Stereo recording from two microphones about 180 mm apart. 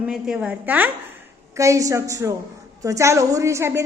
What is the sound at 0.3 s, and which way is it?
A woman's voice, 5° right (ahead or behind).